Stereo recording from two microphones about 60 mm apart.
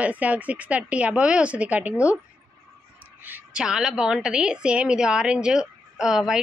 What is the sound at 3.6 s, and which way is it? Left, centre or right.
A woman's voice, centre.